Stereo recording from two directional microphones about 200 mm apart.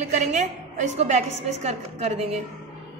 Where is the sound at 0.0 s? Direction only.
35° right (ahead or behind).